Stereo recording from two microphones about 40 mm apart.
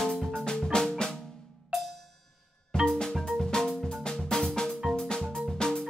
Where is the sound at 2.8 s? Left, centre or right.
Centre.